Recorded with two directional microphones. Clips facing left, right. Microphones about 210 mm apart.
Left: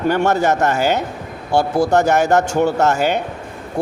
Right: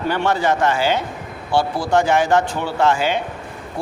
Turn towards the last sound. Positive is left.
turn(degrees=45)  # may be behind; listen again after turning